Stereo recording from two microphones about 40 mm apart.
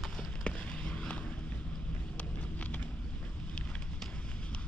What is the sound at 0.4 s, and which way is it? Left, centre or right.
Fireworks, left.